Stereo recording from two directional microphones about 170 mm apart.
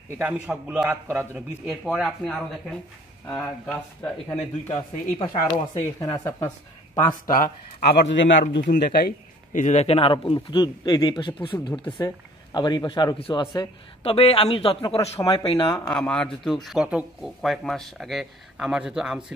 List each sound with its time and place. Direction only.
0.2 s speech: 5° right (ahead or behind); by 4.7 s 10° left (ahead or behind)
5.5 s speech: 20° left (ahead or behind)
7.2 s speech: 55° left (ahead or behind)
7.9 s a man's voice: 85° left
8.7 s a man's voice: 65° left (ahead or behind); by 15.7 s 30° left (ahead or behind)
15.8 s speech: 5° left (ahead or behind)